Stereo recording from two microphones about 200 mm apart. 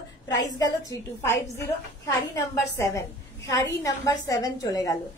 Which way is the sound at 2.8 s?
15° left (ahead or behind).